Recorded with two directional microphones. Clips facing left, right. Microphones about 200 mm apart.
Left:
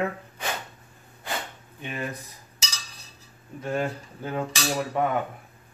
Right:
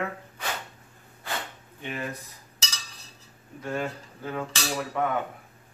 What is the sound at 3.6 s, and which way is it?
Speech, 25° left (ahead or behind).